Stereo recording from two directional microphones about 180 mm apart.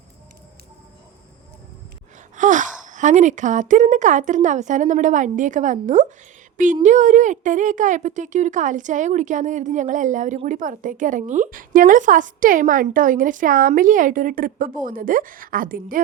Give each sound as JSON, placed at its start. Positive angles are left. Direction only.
{"t": 2.3, "sound": "gasp", "side_deg": -45}
{"t": 2.8, "sound": "a woman's voice", "side_deg": -45}